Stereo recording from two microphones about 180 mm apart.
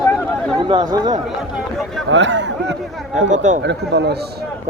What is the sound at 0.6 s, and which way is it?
Speech, 25° right (ahead or behind).